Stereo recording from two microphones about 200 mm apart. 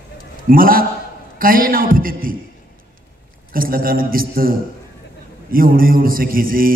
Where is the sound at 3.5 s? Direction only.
45° right (ahead or behind).